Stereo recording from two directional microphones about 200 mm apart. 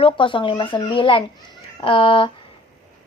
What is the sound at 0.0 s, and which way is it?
Speech, 25° left (ahead or behind).